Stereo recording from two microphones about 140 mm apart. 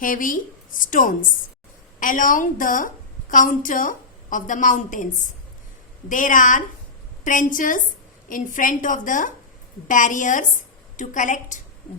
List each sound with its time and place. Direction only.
0.0 s a woman's voice: 75° left (ahead or behind)
6.1 s a woman's voice: 70° left (ahead or behind)